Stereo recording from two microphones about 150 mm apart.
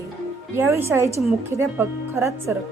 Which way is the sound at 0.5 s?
15° right (ahead or behind).